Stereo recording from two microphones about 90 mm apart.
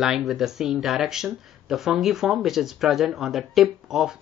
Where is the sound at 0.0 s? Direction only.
5° right (ahead or behind).